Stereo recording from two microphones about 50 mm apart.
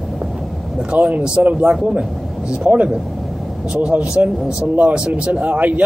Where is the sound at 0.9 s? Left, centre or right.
Right.